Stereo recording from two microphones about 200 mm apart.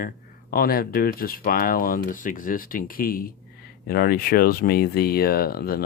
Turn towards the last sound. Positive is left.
turn(degrees=50)  # may be behind; listen again after turning